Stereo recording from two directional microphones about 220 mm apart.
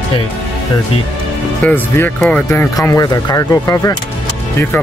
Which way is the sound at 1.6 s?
10° left (ahead or behind).